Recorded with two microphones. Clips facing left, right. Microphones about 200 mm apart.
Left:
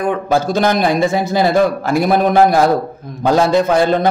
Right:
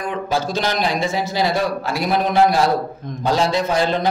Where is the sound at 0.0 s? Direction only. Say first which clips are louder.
Left 6 dB; 55° left (ahead or behind).